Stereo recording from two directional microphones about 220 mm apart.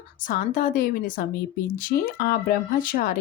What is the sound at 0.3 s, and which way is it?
Speech, 40° left (ahead or behind).